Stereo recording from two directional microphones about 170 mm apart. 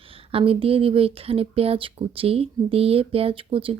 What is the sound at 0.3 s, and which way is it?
Speech, 35° right (ahead or behind).